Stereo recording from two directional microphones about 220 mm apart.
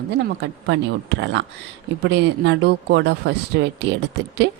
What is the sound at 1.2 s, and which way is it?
Speech, 55° right (ahead or behind).